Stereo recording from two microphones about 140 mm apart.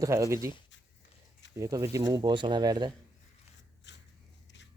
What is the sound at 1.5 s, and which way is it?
Speech, 20° right (ahead or behind).